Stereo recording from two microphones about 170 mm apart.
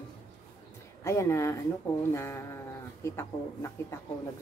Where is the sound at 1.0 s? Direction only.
15° left (ahead or behind).